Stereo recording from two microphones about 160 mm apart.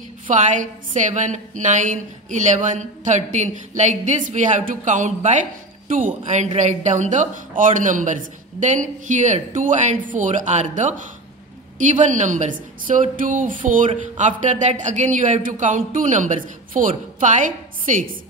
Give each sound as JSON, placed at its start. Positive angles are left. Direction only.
{"t": 0.3, "sound": "a woman's voice", "side_deg": -50}